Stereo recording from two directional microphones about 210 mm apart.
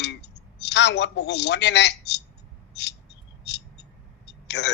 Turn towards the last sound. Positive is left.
turn(degrees=55)  # may be behind; listen again after turning